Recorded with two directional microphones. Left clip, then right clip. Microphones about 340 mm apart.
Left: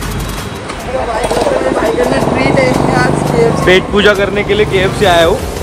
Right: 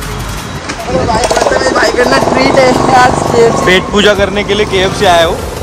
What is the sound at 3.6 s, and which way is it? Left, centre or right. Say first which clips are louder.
Speech: right 1 dB; centre.